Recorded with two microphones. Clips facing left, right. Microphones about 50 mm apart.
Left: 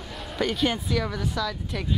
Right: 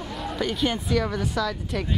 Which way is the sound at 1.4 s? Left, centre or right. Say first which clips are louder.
Right 3 dB; right.